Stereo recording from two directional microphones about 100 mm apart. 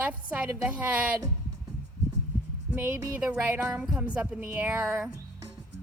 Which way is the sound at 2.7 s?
20° right (ahead or behind).